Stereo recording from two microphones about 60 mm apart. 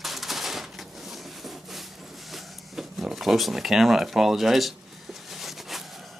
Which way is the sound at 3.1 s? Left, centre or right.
Centre.